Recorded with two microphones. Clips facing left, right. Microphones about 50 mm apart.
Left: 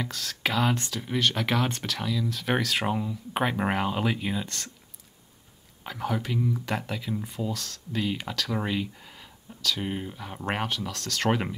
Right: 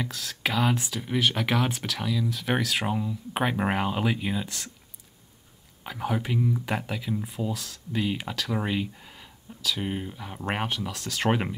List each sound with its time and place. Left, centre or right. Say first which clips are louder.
0.0 s speech: even; centre
5.9 s speech: right 1 dB; centre